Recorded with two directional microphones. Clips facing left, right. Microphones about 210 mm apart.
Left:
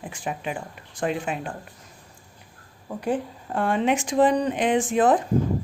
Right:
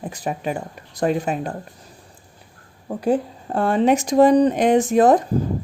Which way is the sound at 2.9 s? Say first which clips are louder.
Right 6 dB; 40° right (ahead or behind).